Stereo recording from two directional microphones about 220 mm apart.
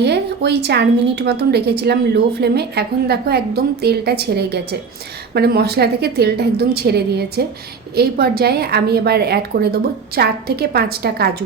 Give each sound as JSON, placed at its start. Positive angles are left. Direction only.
{"t": 0.0, "sound": "a woman's voice", "side_deg": -50}